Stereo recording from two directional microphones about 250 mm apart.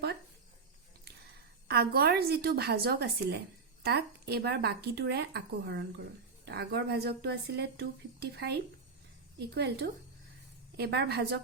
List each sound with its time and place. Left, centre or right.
1.6 s speech: right
9.6 s speech: right